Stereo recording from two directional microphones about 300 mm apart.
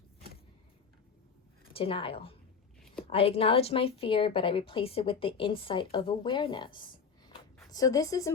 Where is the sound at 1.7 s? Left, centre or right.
Centre.